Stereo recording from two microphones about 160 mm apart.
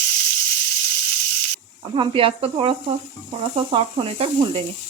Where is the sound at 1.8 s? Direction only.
30° right (ahead or behind).